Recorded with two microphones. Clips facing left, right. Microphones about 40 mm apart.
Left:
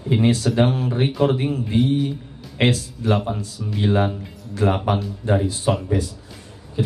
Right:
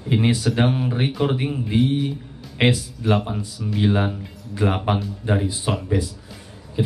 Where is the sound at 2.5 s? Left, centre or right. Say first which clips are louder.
Even; centre.